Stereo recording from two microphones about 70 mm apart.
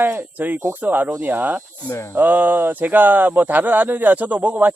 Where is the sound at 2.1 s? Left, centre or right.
Right.